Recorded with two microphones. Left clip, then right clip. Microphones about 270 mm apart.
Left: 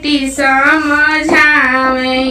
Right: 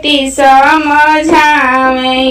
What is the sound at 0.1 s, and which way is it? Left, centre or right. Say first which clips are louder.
Child singing: right 6 dB; centre.